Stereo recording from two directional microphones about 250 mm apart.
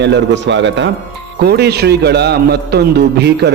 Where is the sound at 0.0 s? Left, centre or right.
Right.